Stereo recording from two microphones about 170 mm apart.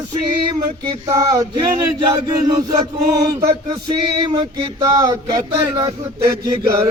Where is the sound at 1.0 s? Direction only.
20° right (ahead or behind).